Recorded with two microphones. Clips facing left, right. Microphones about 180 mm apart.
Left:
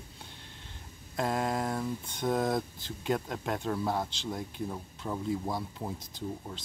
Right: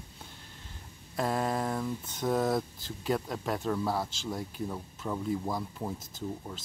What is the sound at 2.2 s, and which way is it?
Speech, 20° left (ahead or behind).